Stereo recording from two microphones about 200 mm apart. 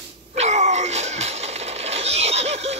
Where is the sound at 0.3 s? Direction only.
35° right (ahead or behind).